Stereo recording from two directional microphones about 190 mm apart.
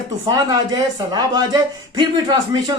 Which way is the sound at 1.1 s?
20° right (ahead or behind).